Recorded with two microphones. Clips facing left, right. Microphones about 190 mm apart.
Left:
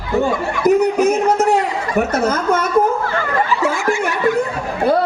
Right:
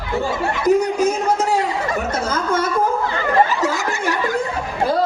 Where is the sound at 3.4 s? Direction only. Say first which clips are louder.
Left 3 dB; 40° right (ahead or behind).